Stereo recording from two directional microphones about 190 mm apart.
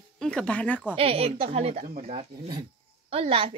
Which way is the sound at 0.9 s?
30° right (ahead or behind).